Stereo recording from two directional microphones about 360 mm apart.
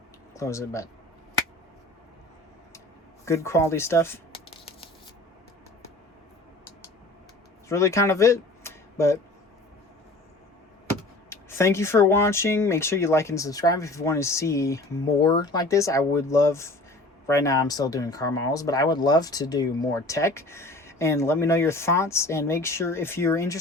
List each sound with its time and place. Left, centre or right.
0.3 s speech: centre
3.2 s speech: centre
7.7 s speech: centre
11.3 s speech: centre